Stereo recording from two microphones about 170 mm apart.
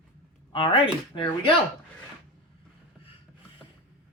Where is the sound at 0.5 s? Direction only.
30° left (ahead or behind).